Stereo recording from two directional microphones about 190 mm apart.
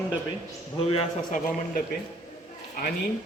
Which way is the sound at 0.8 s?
30° left (ahead or behind).